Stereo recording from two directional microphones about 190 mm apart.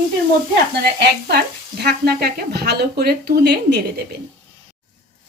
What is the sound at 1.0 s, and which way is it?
Speech, 60° right (ahead or behind).